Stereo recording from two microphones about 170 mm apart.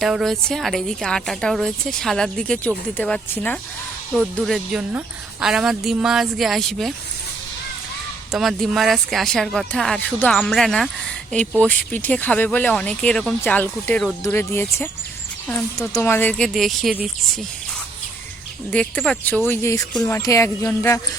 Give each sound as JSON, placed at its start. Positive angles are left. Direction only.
{"t": 0.0, "sound": "a woman's voice", "side_deg": 0}
{"t": 8.3, "sound": "a woman's voice", "side_deg": 0}
{"t": 16.5, "sound": "a woman's voice", "side_deg": 0}
{"t": 18.7, "sound": "speech", "side_deg": 5}